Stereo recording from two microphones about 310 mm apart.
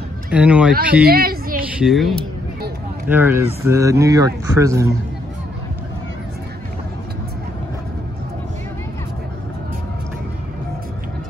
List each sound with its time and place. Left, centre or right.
0.3 s speech: centre
1.0 s a sound: right
1.6 s speech: centre